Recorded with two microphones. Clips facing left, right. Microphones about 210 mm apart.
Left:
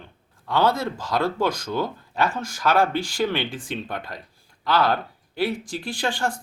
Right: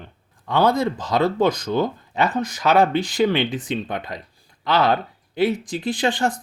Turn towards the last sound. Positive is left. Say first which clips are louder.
# right 5 dB
turn(degrees=-20)  # may be behind; listen again after turning